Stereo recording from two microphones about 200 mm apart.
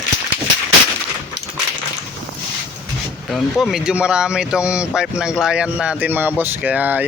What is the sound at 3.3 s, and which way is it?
Speech, centre (ahead or behind).